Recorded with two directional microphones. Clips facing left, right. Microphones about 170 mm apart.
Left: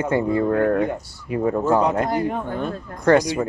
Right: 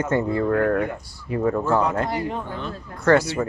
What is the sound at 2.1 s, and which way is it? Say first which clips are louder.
Speech: left 4 dB; 50° left (ahead or behind).